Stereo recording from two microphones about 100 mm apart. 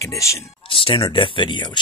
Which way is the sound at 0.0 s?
30° left (ahead or behind).